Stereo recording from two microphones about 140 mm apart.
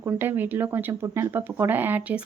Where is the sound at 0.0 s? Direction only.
15° right (ahead or behind).